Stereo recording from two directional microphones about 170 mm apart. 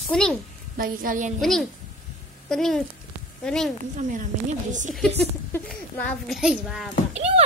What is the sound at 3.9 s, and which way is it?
Speech, 50° right (ahead or behind).